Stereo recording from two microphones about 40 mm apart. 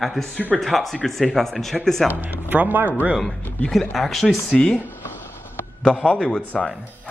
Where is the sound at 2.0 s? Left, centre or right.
Right.